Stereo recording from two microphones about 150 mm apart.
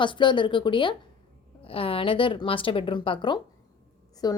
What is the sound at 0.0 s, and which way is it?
A woman's voice, 30° left (ahead or behind).